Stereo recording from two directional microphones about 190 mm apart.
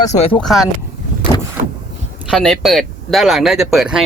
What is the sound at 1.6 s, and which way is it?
Vehicle, 40° right (ahead or behind).